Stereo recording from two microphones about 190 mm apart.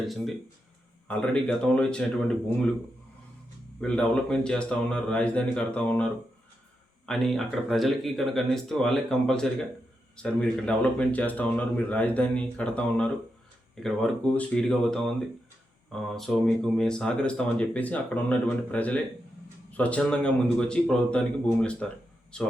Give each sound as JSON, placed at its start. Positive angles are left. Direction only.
{"t": 1.0, "sound": "speech", "side_deg": 5}
{"t": 3.8, "sound": "speech", "side_deg": 5}